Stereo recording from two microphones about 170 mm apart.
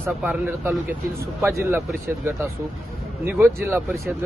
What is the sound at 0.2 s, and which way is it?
Speech, 5° right (ahead or behind).